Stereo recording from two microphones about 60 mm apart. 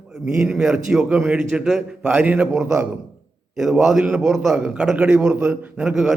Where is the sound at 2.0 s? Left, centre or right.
Right.